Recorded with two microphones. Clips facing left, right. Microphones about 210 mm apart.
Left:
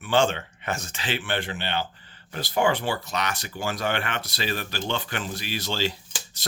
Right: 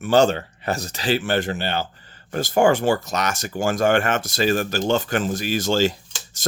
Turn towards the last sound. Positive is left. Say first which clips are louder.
# even
turn(degrees=-45)  # may be behind; listen again after turning